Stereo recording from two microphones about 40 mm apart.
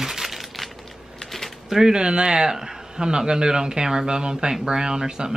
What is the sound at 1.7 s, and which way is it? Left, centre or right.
Speech, centre.